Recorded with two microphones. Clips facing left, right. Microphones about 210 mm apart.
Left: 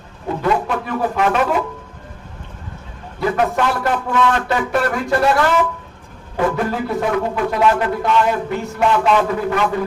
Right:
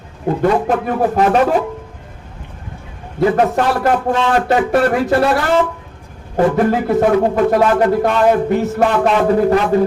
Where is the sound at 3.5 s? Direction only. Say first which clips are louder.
Right 4 dB; 40° right (ahead or behind).